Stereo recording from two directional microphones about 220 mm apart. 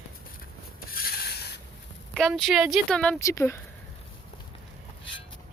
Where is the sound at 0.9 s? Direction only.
40° left (ahead or behind).